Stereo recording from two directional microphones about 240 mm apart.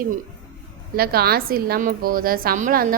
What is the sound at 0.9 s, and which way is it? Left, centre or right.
A woman's voice, right.